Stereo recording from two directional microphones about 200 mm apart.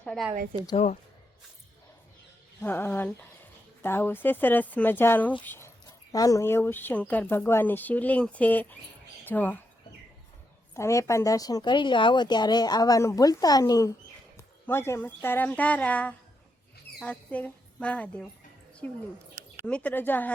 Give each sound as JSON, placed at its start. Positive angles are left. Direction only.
{"t": 0.0, "sound": "a woman's voice", "side_deg": 5}
{"t": 0.5, "sound": "speech", "side_deg": -30}
{"t": 2.6, "sound": "speech", "side_deg": 10}
{"t": 10.8, "sound": "a woman's voice", "side_deg": 15}
{"t": 19.6, "sound": "speech", "side_deg": 5}